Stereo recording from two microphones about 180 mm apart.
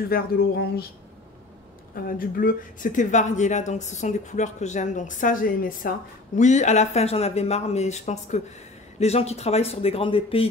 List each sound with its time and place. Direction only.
0.1 s speech: 60° left (ahead or behind)
2.0 s speech: 50° left (ahead or behind); by 10.4 s 30° left (ahead or behind)